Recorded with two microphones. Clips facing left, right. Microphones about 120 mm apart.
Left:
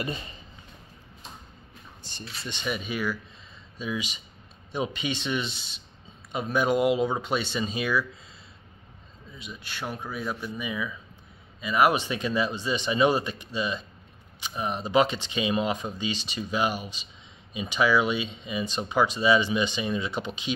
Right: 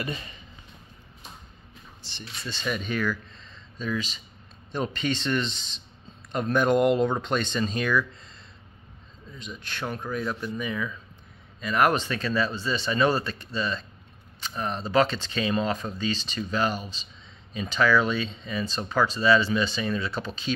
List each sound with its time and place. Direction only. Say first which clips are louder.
0.0 s speech: left 1 dB; 30° left (ahead or behind)
2.0 s speech: left 1 dB; 50° left (ahead or behind)
2.4 s speech: right 1 dB; 15° left (ahead or behind)
9.4 s speech: right 2 dB; 5° left (ahead or behind)